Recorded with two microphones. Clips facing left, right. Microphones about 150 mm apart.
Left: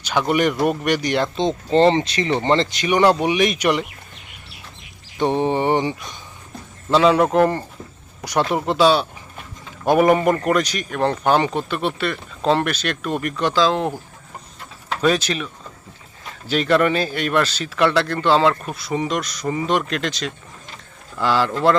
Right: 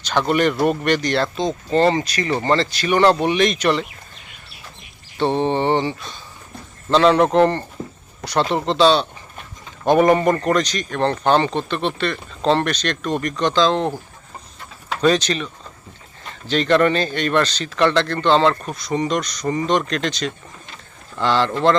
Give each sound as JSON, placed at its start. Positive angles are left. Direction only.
{"t": 0.0, "sound": "speech", "side_deg": 10}
{"t": 1.4, "sound": "speech", "side_deg": 25}
{"t": 5.1, "sound": "speech", "side_deg": 15}
{"t": 6.9, "sound": "speech", "side_deg": 5}
{"t": 15.0, "sound": "speech", "side_deg": 5}